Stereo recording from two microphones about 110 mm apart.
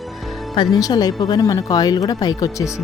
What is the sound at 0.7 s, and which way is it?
Speech, 35° left (ahead or behind).